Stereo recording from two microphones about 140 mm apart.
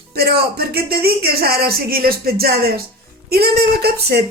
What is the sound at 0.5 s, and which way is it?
Speech, 90° right.